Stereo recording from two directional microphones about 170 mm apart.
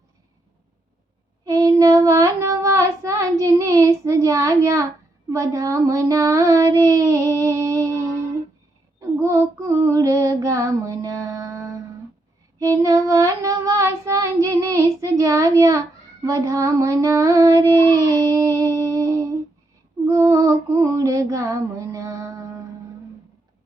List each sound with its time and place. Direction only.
1.5 s child singing: 20° right (ahead or behind)
9.0 s female singing: 15° right (ahead or behind)
12.5 s child singing: 20° right (ahead or behind)
17.9 s humming: 20° right (ahead or behind)
20.1 s a sound: 15° right (ahead or behind)